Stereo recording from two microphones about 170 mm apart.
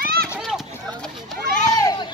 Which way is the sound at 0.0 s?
65° right (ahead or behind).